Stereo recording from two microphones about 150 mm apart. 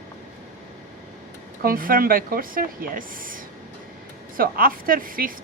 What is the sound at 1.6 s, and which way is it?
A woman's voice, 70° right (ahead or behind).